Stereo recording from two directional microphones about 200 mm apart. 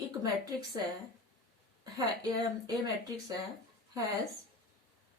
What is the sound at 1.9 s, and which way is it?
Speech, 20° right (ahead or behind).